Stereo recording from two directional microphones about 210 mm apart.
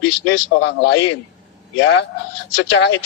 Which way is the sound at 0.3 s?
55° left (ahead or behind).